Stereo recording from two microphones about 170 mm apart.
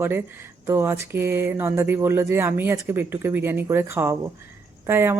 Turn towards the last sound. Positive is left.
turn(degrees=-15)  # may be behind; listen again after turning